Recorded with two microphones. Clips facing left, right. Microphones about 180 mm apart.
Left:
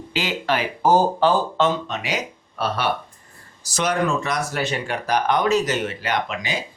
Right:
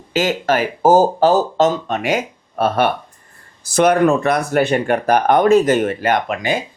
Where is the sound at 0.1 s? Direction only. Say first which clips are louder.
Right 7 dB; 45° right (ahead or behind).